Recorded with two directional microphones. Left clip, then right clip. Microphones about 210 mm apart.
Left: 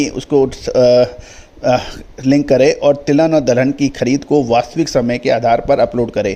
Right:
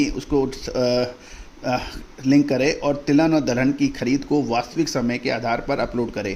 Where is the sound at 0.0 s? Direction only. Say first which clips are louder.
Left 8 dB; 35° left (ahead or behind).